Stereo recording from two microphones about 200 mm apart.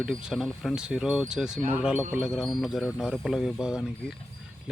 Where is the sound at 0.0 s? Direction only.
5° right (ahead or behind).